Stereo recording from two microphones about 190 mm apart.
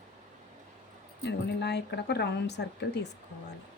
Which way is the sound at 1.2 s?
65° left (ahead or behind).